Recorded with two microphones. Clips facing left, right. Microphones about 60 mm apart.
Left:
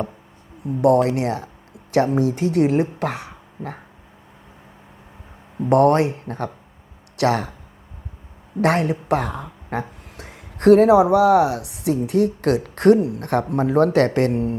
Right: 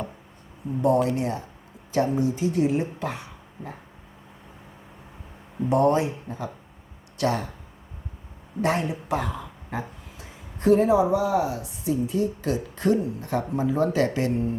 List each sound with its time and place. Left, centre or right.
0.8 s speech: left
5.6 s speech: left
8.6 s speech: left